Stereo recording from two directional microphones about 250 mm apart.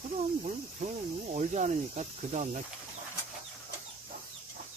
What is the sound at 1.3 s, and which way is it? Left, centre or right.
Speech, right.